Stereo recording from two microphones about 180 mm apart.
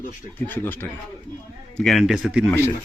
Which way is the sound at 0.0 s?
50° left (ahead or behind).